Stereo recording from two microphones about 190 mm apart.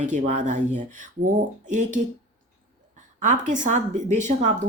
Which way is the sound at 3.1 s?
40° right (ahead or behind).